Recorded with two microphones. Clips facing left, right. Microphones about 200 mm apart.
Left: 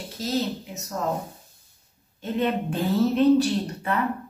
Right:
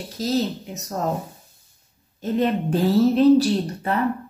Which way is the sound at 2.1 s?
40° right (ahead or behind).